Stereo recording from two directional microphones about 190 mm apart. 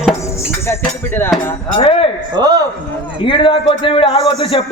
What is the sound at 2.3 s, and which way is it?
Speech, 20° right (ahead or behind).